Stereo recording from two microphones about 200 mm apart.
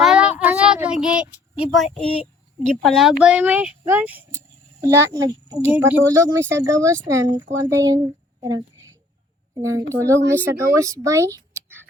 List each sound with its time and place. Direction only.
0.0 s child singing: 5° right (ahead or behind)
2.6 s a child's voice: 5° left (ahead or behind); by 11.8 s 15° right (ahead or behind)